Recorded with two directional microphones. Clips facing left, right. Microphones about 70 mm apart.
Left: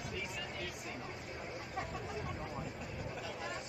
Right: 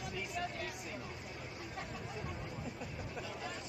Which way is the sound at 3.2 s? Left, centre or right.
Centre.